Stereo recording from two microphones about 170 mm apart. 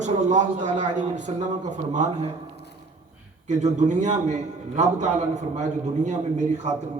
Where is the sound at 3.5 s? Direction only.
45° right (ahead or behind).